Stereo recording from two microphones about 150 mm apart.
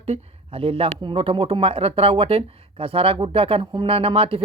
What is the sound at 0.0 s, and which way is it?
Speech, 40° right (ahead or behind).